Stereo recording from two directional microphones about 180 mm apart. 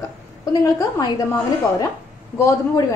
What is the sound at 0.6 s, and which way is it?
Speech, 20° left (ahead or behind).